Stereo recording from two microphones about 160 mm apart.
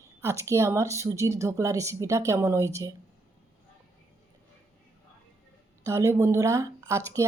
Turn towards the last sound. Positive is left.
turn(degrees=-20)  # may be behind; listen again after turning